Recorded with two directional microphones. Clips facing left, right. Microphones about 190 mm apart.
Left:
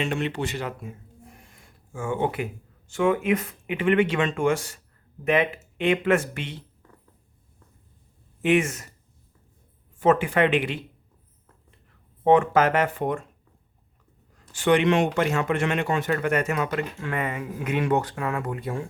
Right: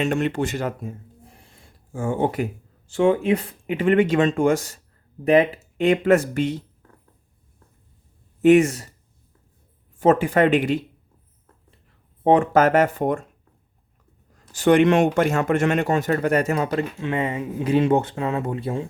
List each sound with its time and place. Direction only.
0.0 s speech: 45° right (ahead or behind)
8.4 s speech: 40° right (ahead or behind)
10.0 s speech: 40° right (ahead or behind)
12.2 s speech: 35° right (ahead or behind)
14.5 s speech: 40° right (ahead or behind); by 18.9 s 25° right (ahead or behind)